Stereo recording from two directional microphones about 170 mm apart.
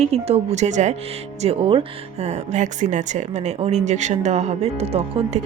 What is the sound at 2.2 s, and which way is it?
Speech, 45° right (ahead or behind).